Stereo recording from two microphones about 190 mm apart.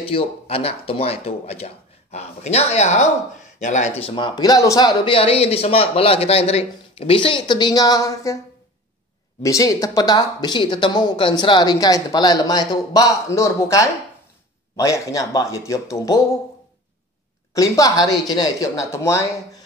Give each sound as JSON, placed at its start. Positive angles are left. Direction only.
{"t": 0.0, "sound": "a man's voice", "side_deg": 30}
{"t": 9.4, "sound": "a man's voice", "side_deg": 15}
{"t": 17.6, "sound": "a man's voice", "side_deg": 20}